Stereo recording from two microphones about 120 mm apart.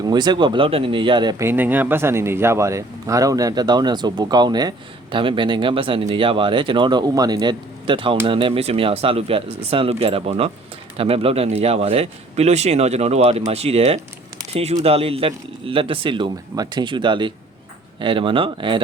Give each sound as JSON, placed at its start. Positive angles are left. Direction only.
{"t": 0.0, "sound": "speech", "side_deg": -35}
{"t": 1.4, "sound": "a man's voice", "side_deg": -20}